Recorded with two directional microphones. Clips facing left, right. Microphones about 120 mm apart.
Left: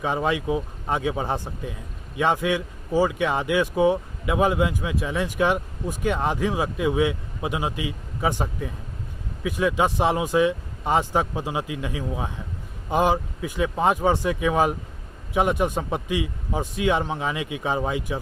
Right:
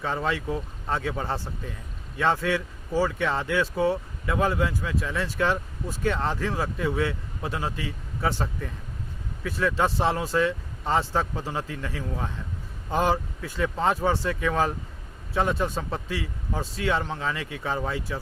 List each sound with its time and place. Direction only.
0.0 s speech: 15° left (ahead or behind)